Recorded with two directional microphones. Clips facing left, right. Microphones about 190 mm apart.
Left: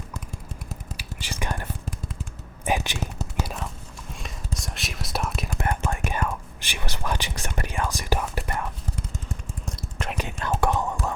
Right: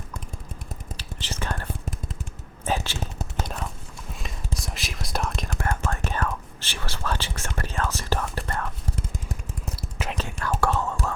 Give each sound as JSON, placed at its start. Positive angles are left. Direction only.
{"t": 0.9, "sound": "whispering", "side_deg": 10}
{"t": 2.6, "sound": "a sound", "side_deg": 15}
{"t": 4.1, "sound": "whispering", "side_deg": 0}
{"t": 5.5, "sound": "whispering", "side_deg": 20}
{"t": 9.6, "sound": "a sound", "side_deg": -5}
{"t": 10.2, "sound": "whispering", "side_deg": 20}